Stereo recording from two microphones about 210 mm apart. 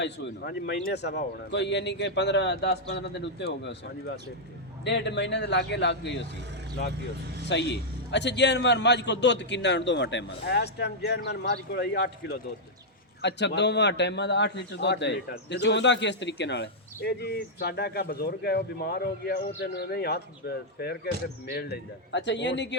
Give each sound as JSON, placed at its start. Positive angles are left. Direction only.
{"t": 0.0, "sound": "a man's voice", "side_deg": 55}
{"t": 7.4, "sound": "a man's voice", "side_deg": 55}